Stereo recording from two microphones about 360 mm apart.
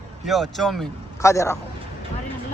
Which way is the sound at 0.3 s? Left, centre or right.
Centre.